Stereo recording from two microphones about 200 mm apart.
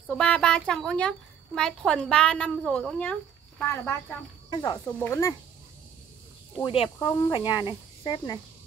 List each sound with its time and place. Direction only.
0.0 s speech: 5° left (ahead or behind)
4.9 s speech: 10° left (ahead or behind)
6.6 s speech: 25° left (ahead or behind)